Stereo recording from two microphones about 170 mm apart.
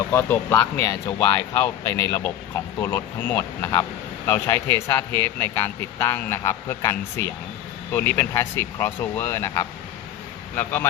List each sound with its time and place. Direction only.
0.0 s a man's voice: 15° left (ahead or behind)